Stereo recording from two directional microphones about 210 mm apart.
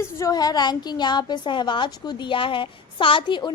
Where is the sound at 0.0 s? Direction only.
15° left (ahead or behind).